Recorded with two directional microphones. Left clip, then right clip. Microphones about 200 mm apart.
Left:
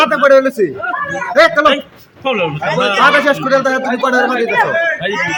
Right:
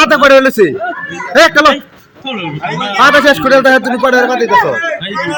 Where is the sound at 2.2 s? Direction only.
35° left (ahead or behind).